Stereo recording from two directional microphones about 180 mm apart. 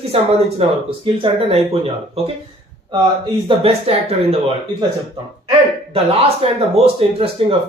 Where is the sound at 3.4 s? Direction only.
35° right (ahead or behind).